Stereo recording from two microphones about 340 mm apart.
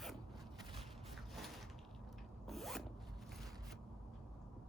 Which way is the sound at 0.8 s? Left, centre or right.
Centre.